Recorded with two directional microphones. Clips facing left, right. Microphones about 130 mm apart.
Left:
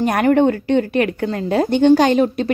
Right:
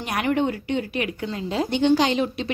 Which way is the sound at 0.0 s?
45° left (ahead or behind).